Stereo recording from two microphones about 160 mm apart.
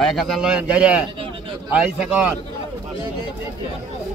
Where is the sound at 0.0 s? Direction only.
Centre (ahead or behind).